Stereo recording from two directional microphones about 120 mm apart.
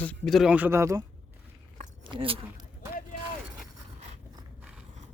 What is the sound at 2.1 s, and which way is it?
Speech, 50° right (ahead or behind).